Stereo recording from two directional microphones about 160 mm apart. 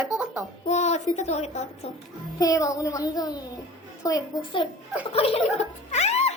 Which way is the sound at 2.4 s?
20° left (ahead or behind).